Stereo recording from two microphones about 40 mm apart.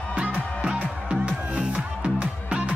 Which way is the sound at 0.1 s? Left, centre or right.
Right.